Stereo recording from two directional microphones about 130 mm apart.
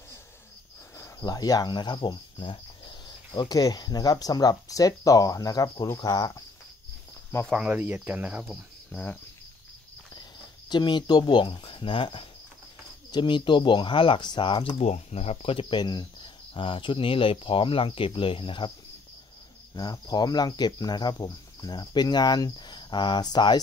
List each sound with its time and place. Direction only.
0.9 s cricket: 25° left (ahead or behind)
7.5 s speech: 10° right (ahead or behind)
8.9 s speech: 15° left (ahead or behind)
10.7 s cricket: 35° left (ahead or behind)
19.7 s cricket: 30° left (ahead or behind)